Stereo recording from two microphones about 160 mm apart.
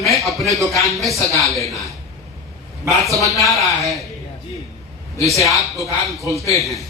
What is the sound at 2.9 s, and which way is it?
Speech, centre (ahead or behind).